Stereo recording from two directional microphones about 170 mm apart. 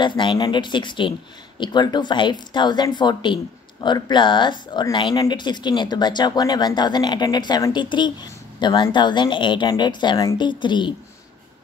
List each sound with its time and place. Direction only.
0.0 s speech: 30° left (ahead or behind)